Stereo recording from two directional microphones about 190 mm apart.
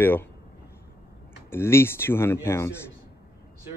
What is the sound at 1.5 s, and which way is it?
Speech, 15° left (ahead or behind).